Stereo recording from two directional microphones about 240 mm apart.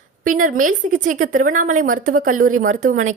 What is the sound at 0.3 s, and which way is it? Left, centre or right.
A woman's voice, right.